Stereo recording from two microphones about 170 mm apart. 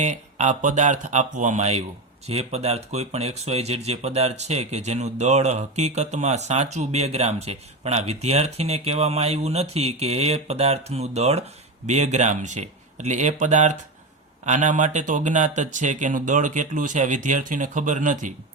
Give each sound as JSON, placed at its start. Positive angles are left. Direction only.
{"t": 0.0, "sound": "speech", "side_deg": -45}